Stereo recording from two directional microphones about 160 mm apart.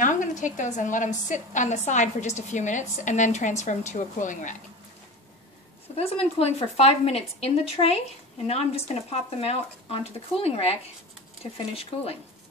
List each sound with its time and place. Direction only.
0.0 s a woman's voice: 55° left (ahead or behind)
5.9 s a woman's voice: 40° left (ahead or behind)